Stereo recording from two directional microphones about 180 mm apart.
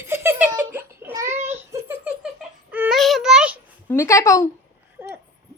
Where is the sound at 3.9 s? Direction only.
15° left (ahead or behind).